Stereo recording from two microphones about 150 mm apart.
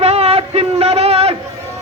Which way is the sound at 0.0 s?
45° right (ahead or behind).